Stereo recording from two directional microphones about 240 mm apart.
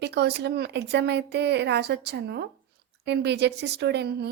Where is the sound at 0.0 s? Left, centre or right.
Right.